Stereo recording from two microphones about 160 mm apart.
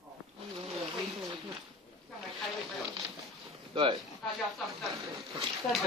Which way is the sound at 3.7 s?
30° right (ahead or behind).